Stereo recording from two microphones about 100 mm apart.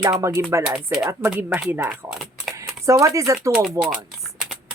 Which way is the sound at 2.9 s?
35° right (ahead or behind).